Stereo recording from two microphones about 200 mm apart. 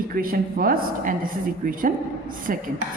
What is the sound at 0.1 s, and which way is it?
A woman's voice, 45° right (ahead or behind).